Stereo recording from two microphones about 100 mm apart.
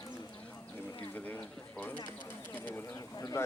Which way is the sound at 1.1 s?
20° left (ahead or behind).